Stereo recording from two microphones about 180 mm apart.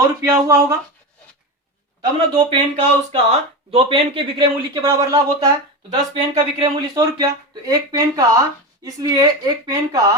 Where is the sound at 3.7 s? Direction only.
30° right (ahead or behind).